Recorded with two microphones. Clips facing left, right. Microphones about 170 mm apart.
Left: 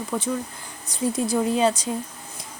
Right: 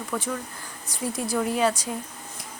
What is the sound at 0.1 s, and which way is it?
A woman's voice, 25° left (ahead or behind).